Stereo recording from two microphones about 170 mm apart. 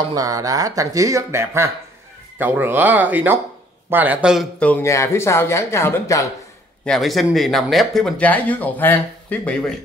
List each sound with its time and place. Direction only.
0.1 s speech: 20° right (ahead or behind); by 4.5 s 5° right (ahead or behind)
4.6 s speech: 15° left (ahead or behind)
6.8 s speech: centre (ahead or behind)